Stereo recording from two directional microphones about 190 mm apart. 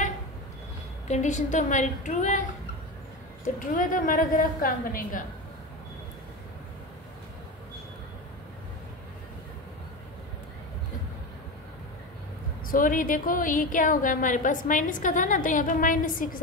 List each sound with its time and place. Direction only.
1.0 s a woman's voice: 40° left (ahead or behind)
3.4 s a woman's voice: 45° left (ahead or behind)
12.6 s a woman's voice: 45° left (ahead or behind)